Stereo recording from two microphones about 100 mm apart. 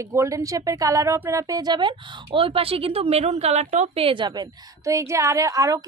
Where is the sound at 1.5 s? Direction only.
45° right (ahead or behind).